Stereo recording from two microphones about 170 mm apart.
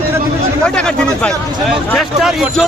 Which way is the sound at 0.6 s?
5° left (ahead or behind).